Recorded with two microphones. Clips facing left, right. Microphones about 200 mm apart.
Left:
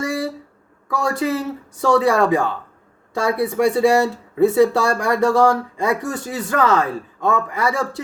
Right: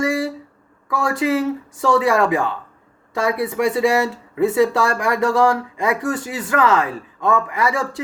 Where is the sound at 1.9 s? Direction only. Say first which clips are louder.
Left 1 dB; 30° left (ahead or behind).